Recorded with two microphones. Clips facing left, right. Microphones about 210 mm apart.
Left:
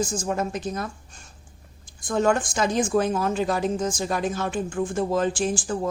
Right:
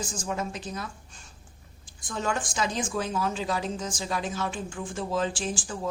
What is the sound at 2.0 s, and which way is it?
A woman's voice, 50° left (ahead or behind).